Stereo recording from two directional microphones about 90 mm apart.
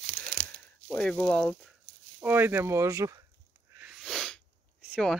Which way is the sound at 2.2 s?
20° right (ahead or behind).